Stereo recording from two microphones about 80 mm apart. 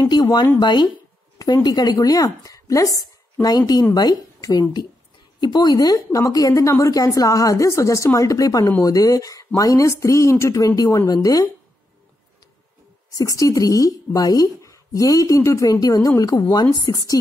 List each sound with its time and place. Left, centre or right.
0.1 s speech: left
1.4 s a woman's voice: left
5.4 s a woman's voice: left
13.1 s a woman's voice: left